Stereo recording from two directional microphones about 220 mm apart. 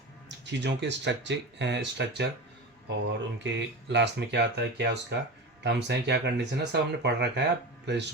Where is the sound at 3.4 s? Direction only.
50° right (ahead or behind).